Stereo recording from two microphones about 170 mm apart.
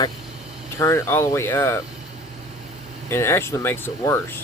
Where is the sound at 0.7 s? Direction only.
15° left (ahead or behind).